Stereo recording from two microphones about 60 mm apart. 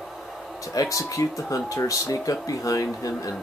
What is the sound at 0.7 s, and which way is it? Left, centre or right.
Speech, left.